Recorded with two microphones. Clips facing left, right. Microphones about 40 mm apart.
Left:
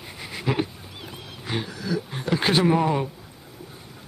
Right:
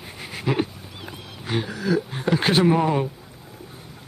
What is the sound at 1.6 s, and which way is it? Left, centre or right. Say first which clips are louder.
Dog: right 5 dB; centre.